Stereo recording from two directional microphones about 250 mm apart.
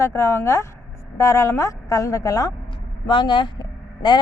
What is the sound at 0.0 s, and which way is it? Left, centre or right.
Speech, centre.